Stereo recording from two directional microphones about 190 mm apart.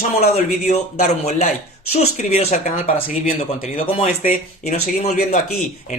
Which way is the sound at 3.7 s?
35° left (ahead or behind).